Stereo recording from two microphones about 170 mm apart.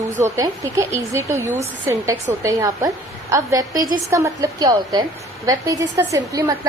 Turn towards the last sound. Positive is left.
turn(degrees=-20)  # may be behind; listen again after turning